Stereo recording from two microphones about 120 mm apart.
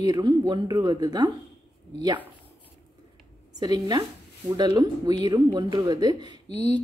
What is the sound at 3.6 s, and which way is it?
A woman's voice, 30° right (ahead or behind).